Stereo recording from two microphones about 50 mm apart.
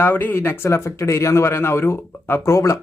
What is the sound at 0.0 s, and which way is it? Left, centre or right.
Speech, left.